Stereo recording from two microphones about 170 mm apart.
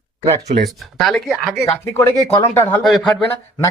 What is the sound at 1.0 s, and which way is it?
Speech, centre (ahead or behind).